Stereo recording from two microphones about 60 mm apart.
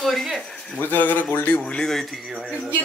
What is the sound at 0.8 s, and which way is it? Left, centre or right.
Speech, left.